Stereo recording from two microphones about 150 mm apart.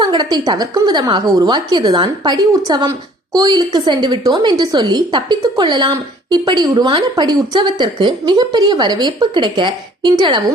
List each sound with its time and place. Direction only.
0.0 s a woman's voice: 30° right (ahead or behind)